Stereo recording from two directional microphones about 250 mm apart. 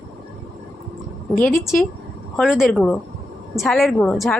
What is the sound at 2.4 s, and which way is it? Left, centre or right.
A woman's voice, centre.